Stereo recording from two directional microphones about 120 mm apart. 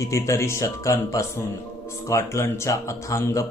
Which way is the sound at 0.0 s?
25° left (ahead or behind).